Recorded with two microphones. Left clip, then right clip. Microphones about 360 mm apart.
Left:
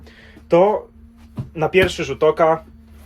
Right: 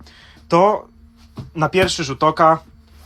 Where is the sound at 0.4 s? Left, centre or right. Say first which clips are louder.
Even; centre.